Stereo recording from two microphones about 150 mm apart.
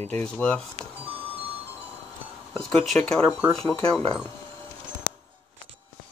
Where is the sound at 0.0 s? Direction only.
10° left (ahead or behind).